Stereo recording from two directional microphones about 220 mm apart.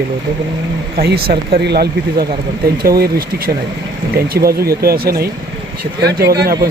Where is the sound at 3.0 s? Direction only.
45° right (ahead or behind).